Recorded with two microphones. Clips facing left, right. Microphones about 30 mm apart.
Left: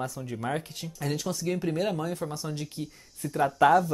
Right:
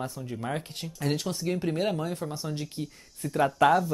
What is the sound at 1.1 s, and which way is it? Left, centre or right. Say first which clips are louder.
Speech: right 1 dB; right.